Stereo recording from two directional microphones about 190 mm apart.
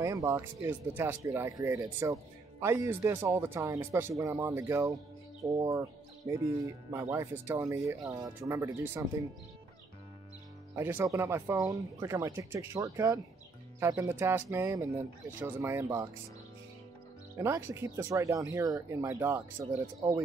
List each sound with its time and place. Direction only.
0.0 s speech: 15° right (ahead or behind)
10.8 s speech: 10° right (ahead or behind)
17.4 s speech: 15° right (ahead or behind)